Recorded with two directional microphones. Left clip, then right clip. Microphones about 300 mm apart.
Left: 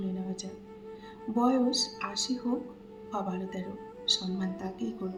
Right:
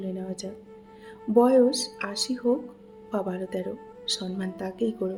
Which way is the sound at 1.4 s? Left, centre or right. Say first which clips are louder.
Right 8 dB; right.